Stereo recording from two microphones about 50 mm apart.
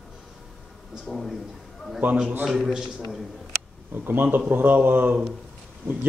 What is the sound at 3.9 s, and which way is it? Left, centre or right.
Speech, right.